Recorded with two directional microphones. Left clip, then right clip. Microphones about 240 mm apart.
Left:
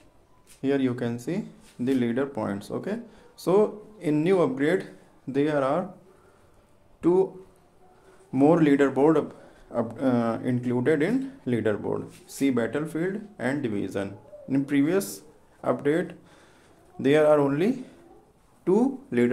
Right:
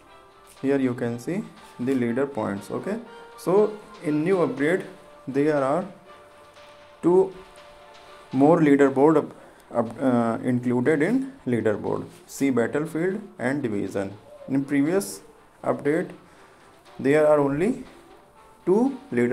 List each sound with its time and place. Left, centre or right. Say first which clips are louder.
0.6 s speech: right 2 dB; centre
4.0 s speech: even; centre
4.6 s speech: right 1 dB; centre
7.0 s speech: right 3 dB; centre
8.4 s speech: right 3 dB; centre